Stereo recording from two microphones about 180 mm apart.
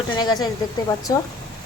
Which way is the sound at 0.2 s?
25° left (ahead or behind).